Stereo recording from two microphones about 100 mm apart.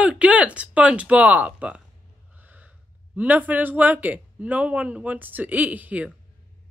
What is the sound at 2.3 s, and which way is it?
Gasp, 15° right (ahead or behind).